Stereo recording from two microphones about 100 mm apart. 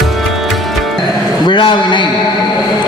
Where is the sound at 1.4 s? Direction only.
50° left (ahead or behind).